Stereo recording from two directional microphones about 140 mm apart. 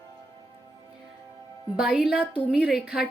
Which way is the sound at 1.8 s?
5° right (ahead or behind).